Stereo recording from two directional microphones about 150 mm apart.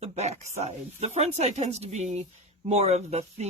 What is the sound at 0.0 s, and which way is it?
Speech, 50° right (ahead or behind).